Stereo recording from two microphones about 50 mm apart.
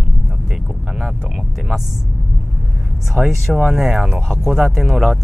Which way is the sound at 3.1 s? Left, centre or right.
Centre.